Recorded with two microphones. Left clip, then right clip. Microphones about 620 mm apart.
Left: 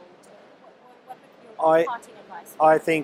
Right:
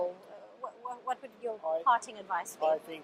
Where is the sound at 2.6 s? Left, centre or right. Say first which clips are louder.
Left 15 dB; left.